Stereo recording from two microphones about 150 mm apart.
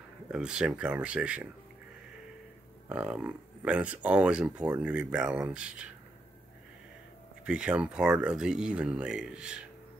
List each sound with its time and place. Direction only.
0.3 s speech: 5° right (ahead or behind)
2.9 s speech: 5° right (ahead or behind)
7.4 s speech: 5° right (ahead or behind)